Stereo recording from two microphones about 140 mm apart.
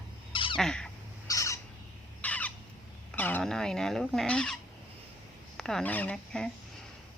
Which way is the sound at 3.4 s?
5° left (ahead or behind).